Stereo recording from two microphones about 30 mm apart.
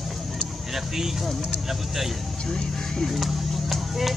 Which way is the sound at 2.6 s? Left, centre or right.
Centre.